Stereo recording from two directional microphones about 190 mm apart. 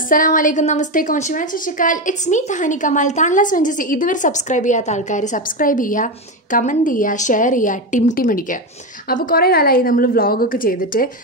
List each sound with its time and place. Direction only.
0.1 s a woman's voice: 45° left (ahead or behind)